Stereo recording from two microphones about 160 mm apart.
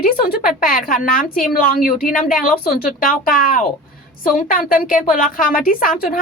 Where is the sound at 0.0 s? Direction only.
65° left (ahead or behind).